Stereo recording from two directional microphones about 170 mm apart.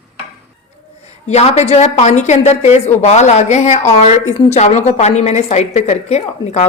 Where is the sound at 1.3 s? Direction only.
40° left (ahead or behind).